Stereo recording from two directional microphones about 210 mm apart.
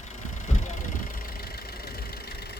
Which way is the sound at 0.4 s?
35° left (ahead or behind).